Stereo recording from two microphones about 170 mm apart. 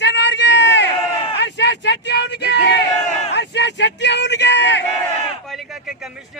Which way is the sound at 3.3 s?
90° left.